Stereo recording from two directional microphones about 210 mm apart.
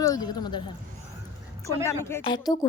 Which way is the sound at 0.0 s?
20° left (ahead or behind).